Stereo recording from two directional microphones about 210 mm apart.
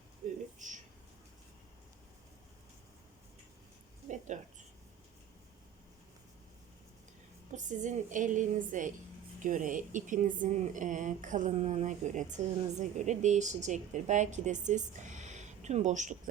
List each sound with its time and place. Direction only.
0.2 s a sound: 35° right (ahead or behind)
4.3 s a woman's voice: 35° right (ahead or behind)
7.5 s a woman's voice: 35° right (ahead or behind)